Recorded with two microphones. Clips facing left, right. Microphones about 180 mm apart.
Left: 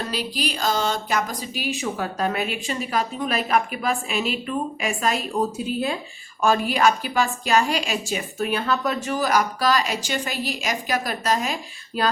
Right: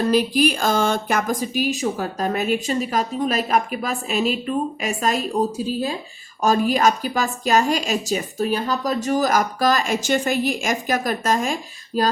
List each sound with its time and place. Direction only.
0.1 s a woman's voice: 50° right (ahead or behind)